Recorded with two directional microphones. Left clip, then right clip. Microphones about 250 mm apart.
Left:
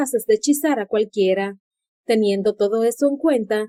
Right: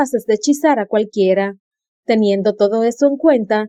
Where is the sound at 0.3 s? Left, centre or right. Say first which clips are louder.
Right 3 dB; right.